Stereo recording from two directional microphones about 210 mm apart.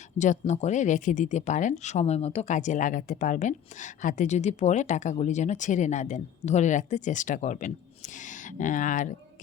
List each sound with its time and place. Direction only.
0.2 s speech: 35° left (ahead or behind)